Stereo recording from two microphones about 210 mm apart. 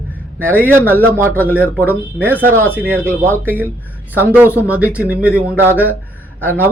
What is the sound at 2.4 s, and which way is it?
Speech, 10° right (ahead or behind).